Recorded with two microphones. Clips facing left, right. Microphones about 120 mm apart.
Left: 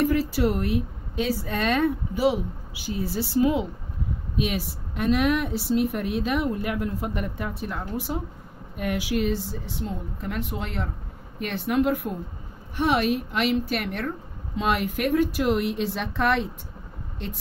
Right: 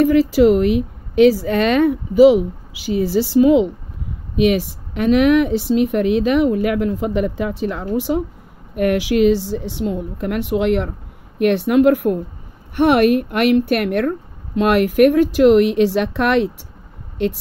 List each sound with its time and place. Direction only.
0.0 s a woman's voice: 90° right
12.7 s speech: 65° right (ahead or behind)